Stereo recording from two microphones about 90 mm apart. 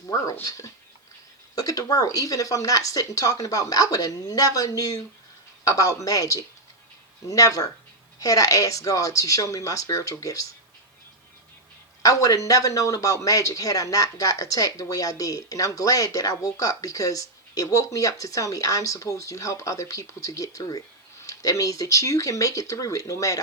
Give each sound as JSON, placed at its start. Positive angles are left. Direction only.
{"t": 0.4, "sound": "a man's voice", "side_deg": 40}
{"t": 12.0, "sound": "a man's voice", "side_deg": 40}